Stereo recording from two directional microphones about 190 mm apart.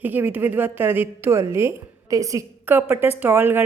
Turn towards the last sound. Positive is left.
turn(degrees=-10)  # may be behind; listen again after turning